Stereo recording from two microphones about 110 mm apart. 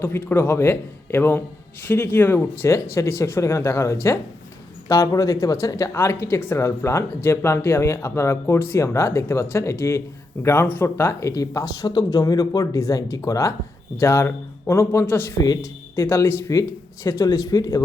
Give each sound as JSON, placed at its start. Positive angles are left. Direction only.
{"t": 0.0, "sound": "speech", "side_deg": 20}